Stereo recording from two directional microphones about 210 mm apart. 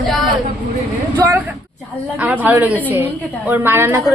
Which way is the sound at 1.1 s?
15° right (ahead or behind).